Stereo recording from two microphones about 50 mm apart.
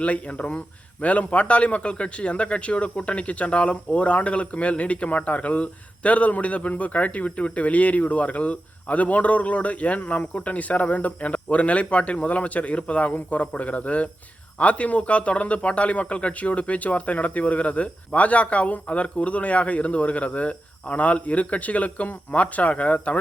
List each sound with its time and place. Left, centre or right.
0.0 s a man's voice: left